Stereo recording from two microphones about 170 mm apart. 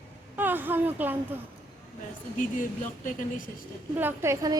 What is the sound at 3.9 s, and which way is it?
Speech, 15° right (ahead or behind).